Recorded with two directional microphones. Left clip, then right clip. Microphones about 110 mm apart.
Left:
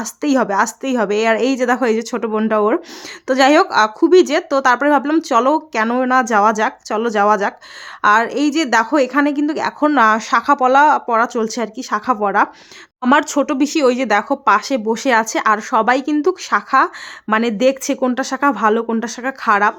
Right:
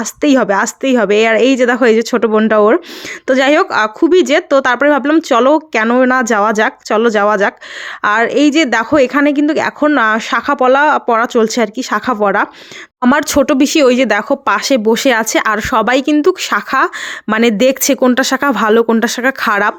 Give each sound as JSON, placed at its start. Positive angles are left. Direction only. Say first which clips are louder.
{"t": 0.0, "sound": "speech", "louder": "right 5 dB", "side_deg": -20}
{"t": 3.2, "sound": "speech", "louder": "right 2 dB", "side_deg": -15}